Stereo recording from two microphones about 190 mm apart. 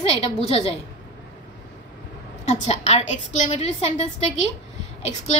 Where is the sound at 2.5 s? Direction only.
35° left (ahead or behind).